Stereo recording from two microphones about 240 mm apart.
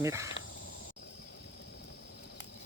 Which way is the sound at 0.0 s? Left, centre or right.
Centre.